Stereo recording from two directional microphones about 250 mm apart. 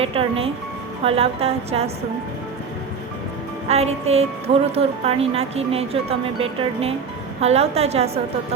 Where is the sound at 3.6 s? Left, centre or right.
Right.